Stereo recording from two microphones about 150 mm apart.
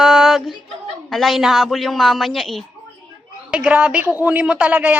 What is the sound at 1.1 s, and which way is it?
A woman's voice, centre (ahead or behind).